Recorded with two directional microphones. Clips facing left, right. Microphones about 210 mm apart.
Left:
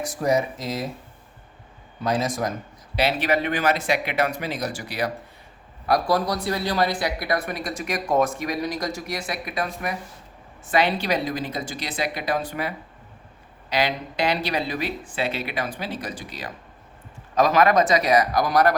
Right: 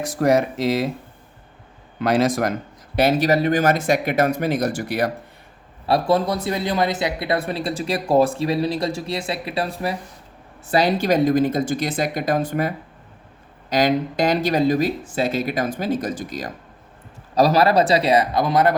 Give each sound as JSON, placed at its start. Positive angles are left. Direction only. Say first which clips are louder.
{"t": 0.2, "sound": "speech", "louder": "right 5 dB", "side_deg": -75}
{"t": 2.0, "sound": "speech", "louder": "right 6 dB", "side_deg": -90}
{"t": 2.9, "sound": "speech", "louder": "right 5 dB", "side_deg": -45}
{"t": 5.8, "sound": "speech", "louder": "right 3 dB", "side_deg": -25}